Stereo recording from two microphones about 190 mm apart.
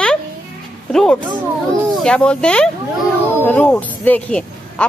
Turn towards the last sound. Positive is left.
turn(degrees=5)  # may be behind; listen again after turning